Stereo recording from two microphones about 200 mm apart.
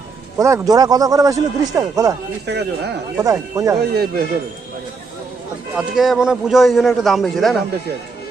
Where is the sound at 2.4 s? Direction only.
60° right (ahead or behind).